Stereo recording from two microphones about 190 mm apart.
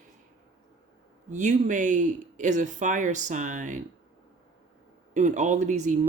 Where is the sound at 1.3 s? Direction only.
40° right (ahead or behind).